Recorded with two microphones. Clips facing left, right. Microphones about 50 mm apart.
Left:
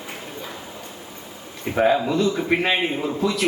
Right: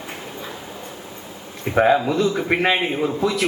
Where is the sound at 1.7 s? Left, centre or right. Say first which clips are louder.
Right 2 dB; right.